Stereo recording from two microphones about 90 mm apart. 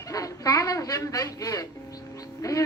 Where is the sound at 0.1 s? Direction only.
40° left (ahead or behind).